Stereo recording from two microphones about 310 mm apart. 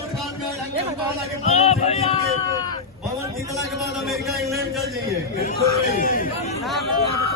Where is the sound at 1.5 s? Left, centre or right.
Centre.